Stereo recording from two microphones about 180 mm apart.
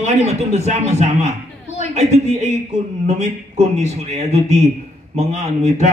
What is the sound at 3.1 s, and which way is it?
A man's voice, 40° right (ahead or behind).